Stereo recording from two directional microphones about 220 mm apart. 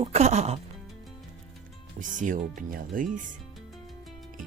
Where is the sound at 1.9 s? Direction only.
35° right (ahead or behind).